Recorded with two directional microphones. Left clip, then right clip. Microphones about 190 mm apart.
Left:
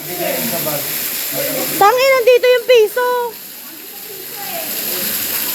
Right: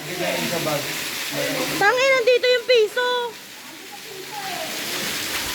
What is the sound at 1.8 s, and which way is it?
Speech, 15° left (ahead or behind).